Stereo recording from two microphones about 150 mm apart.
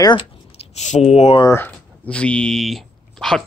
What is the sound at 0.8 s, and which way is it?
Speech, 50° left (ahead or behind).